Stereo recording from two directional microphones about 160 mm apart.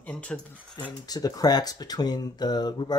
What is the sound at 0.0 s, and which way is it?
Speech, 5° left (ahead or behind).